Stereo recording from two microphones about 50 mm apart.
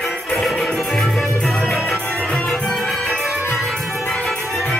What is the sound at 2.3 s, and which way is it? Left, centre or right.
Music, centre.